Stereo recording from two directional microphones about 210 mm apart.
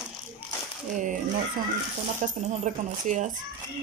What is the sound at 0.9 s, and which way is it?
Speech, 40° right (ahead or behind).